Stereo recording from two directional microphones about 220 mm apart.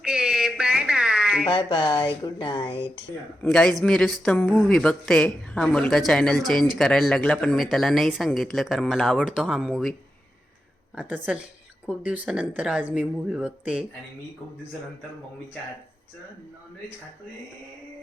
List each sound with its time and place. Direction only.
0.0 s a sound: 5° right (ahead or behind)
1.5 s speech: 20° left (ahead or behind)
3.4 s speech: 5° left (ahead or behind)
10.9 s speech: 5° right (ahead or behind)